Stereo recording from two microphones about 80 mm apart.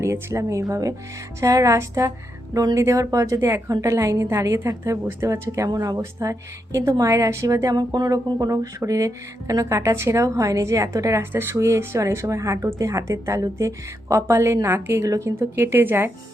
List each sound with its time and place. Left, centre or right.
0.0 s a woman's voice: right
6.0 s a woman's voice: right
11.2 s a woman's voice: right
15.0 s speech: right
15.4 s a woman's voice: right